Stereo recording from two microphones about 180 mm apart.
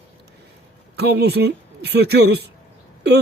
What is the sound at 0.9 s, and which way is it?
A man's voice, 65° right (ahead or behind).